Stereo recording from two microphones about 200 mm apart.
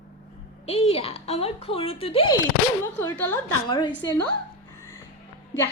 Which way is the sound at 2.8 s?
10° left (ahead or behind).